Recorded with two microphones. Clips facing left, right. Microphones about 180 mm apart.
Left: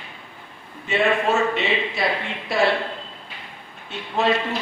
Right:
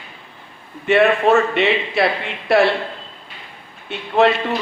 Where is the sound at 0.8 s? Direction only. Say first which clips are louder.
Right 6 dB; 65° right (ahead or behind).